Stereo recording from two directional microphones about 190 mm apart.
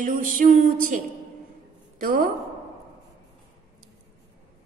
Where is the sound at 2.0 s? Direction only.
50° right (ahead or behind).